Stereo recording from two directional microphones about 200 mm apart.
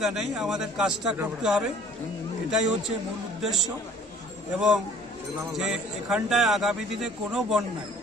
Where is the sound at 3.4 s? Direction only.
Centre (ahead or behind).